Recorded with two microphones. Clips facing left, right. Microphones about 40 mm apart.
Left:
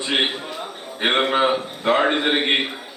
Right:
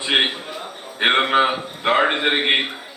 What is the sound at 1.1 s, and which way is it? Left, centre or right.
A man's voice, centre.